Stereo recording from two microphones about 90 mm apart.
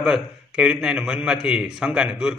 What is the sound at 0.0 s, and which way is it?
A man's voice, 5° right (ahead or behind).